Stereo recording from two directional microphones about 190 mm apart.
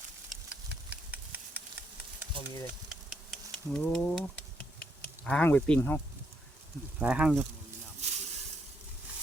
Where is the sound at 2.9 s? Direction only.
Centre (ahead or behind).